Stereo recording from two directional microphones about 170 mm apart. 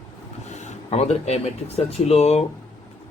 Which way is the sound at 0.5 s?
40° left (ahead or behind).